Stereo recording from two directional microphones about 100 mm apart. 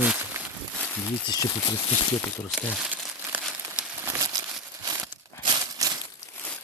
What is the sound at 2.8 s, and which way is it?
Crumpling, 15° right (ahead or behind).